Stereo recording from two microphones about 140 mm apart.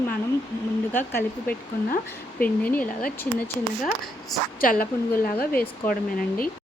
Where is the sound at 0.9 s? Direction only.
15° left (ahead or behind).